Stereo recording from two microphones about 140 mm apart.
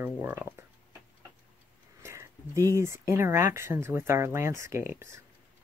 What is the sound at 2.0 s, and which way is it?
Speech, 20° right (ahead or behind).